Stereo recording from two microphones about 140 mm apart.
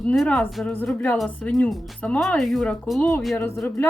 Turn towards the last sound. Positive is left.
turn(degrees=15)  # may be behind; listen again after turning